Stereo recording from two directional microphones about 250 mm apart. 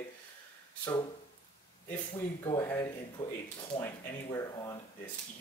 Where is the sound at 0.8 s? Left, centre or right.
Centre.